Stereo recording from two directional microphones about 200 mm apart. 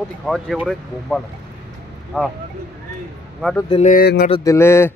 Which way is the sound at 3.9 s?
50° left (ahead or behind).